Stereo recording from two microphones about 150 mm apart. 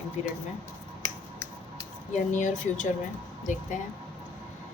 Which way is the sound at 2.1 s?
55° left (ahead or behind).